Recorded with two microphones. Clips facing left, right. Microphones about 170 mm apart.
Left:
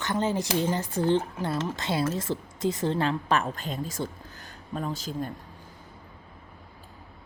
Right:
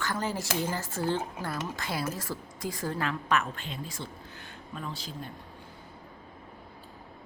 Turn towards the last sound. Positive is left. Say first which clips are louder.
# left 7 dB
turn(degrees=45)  # may be behind; listen again after turning